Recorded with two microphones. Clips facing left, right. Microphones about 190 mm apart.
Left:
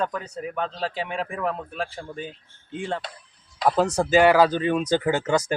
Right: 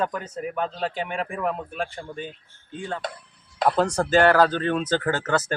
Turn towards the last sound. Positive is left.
turn(degrees=10)  # may be behind; listen again after turning